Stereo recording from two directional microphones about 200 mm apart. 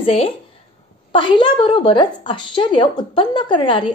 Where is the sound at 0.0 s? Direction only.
30° left (ahead or behind).